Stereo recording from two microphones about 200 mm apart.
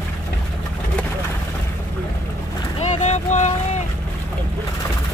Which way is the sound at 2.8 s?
35° left (ahead or behind).